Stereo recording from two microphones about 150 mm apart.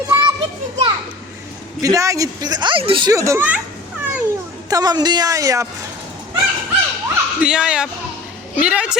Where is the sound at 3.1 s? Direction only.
20° right (ahead or behind).